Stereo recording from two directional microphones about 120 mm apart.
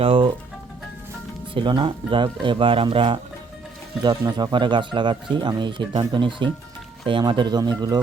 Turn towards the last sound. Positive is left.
turn(degrees=-35)  # may be behind; listen again after turning